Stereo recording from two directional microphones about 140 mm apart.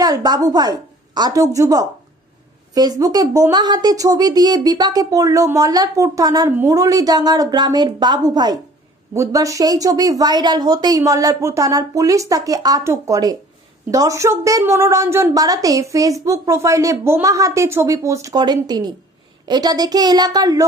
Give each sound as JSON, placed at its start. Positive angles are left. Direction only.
{"t": 0.0, "sound": "a woman's voice", "side_deg": -30}